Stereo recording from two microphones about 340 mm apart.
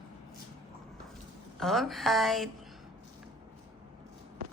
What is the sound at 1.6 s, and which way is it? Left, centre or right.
Speech, centre.